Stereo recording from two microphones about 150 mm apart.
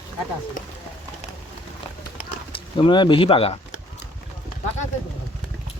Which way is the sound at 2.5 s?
35° left (ahead or behind).